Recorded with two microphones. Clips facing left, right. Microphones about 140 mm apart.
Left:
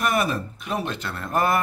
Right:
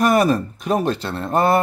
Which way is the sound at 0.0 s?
40° right (ahead or behind).